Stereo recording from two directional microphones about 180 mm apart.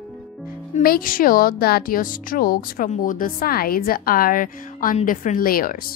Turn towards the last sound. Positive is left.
turn(degrees=55)  # may be behind; listen again after turning